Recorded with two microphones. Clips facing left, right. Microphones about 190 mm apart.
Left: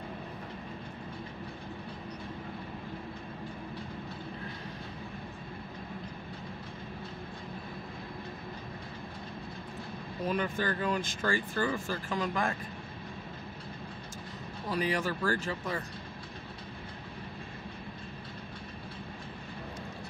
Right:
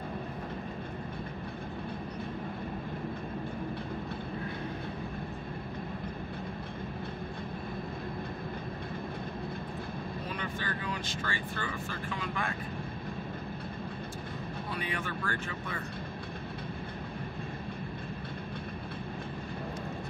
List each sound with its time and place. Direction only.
10.3 s speech: 45° left (ahead or behind)
14.7 s speech: 40° left (ahead or behind)